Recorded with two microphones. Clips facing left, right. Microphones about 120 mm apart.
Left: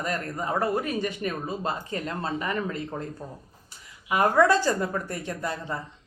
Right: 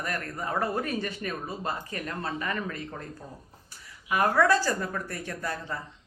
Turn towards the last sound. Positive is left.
turn(degrees=20)  # may be behind; listen again after turning